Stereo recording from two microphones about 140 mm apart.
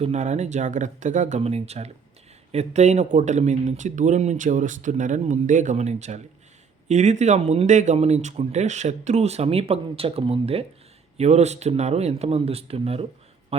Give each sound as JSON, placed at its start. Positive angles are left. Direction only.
{"t": 0.0, "sound": "speech", "side_deg": -55}
{"t": 1.4, "sound": "speech", "side_deg": -50}
{"t": 13.5, "sound": "a sound", "side_deg": -45}